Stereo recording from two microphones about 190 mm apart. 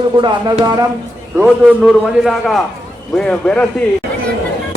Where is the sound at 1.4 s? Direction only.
5° right (ahead or behind).